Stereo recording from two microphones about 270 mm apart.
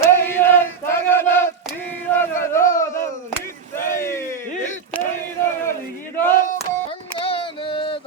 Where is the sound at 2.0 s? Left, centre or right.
Centre.